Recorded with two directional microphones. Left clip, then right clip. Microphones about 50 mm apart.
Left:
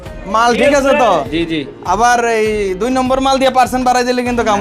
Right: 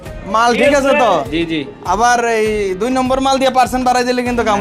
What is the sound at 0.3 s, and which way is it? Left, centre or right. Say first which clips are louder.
A man's voice: left 1 dB; right.